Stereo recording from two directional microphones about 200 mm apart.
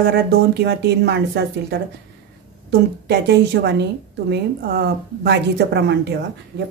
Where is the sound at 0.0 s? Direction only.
50° right (ahead or behind).